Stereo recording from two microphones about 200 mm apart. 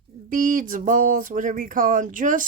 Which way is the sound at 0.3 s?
40° right (ahead or behind).